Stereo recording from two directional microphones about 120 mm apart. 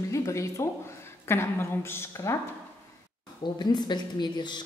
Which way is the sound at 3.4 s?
35° left (ahead or behind).